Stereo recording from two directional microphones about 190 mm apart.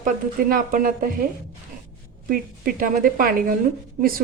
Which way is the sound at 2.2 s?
50° right (ahead or behind).